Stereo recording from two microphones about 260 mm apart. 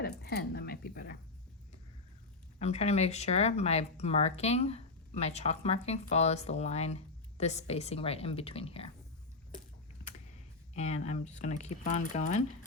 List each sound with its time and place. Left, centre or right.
0.0 s a sound: left
2.6 s speech: left
10.8 s speech: left